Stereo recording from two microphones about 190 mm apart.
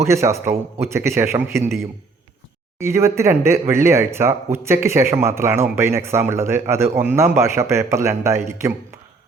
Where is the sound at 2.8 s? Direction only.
15° right (ahead or behind).